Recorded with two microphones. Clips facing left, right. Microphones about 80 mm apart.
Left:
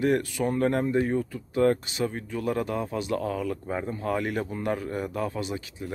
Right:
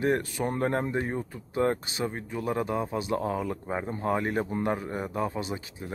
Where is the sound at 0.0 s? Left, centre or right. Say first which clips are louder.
Left 2 dB; right.